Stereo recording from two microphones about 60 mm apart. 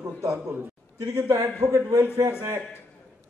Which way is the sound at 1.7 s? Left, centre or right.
Right.